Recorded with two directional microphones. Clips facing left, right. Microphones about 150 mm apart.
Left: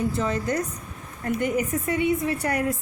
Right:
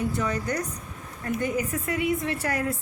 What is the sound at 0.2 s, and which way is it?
Speech, 30° left (ahead or behind).